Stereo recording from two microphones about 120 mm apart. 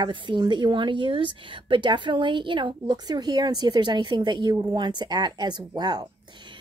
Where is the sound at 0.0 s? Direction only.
40° right (ahead or behind).